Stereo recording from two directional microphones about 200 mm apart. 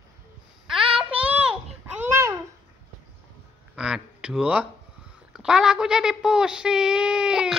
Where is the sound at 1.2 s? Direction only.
5° right (ahead or behind).